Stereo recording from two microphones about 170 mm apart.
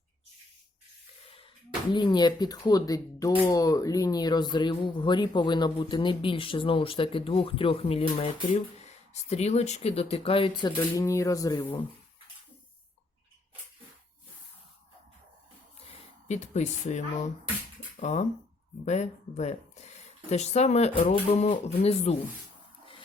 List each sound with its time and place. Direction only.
1.9 s speech: 25° left (ahead or behind)
10.9 s speech: 20° left (ahead or behind)
16.3 s speech: 45° left (ahead or behind)
18.0 s speech: 45° left (ahead or behind)